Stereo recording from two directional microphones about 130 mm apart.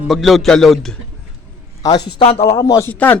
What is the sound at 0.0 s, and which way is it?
Speech, centre (ahead or behind).